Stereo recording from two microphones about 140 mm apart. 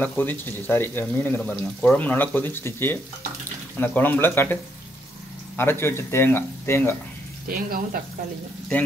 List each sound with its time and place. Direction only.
0.0 s speech: 15° left (ahead or behind)
5.6 s speech: 15° left (ahead or behind)
7.4 s speech: 90° right